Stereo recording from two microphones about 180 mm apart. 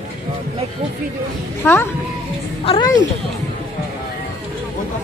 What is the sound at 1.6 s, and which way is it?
Speech, 10° left (ahead or behind).